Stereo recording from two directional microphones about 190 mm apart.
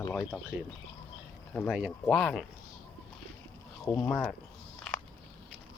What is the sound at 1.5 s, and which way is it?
Speech, centre (ahead or behind).